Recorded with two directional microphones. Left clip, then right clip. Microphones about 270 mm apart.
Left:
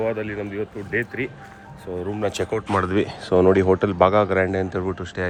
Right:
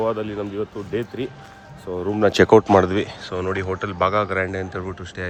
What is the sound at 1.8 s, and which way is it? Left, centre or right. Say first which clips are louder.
Speech: right 6 dB; right.